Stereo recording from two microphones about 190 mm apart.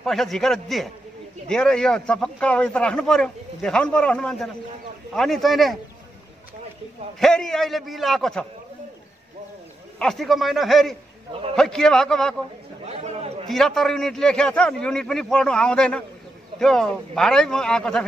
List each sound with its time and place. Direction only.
0.0 s a man's voice: centre (ahead or behind)
7.2 s a man's voice: 5° left (ahead or behind)
9.9 s a man's voice: centre (ahead or behind)
12.8 s chatter: 35° right (ahead or behind)
13.5 s a man's voice: centre (ahead or behind)